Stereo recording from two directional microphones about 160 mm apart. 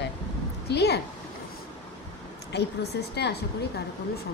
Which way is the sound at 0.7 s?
90° left.